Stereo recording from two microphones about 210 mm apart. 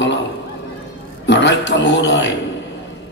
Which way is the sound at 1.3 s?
60° left (ahead or behind).